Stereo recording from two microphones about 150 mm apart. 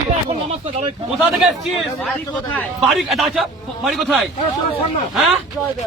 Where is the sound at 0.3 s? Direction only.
40° right (ahead or behind).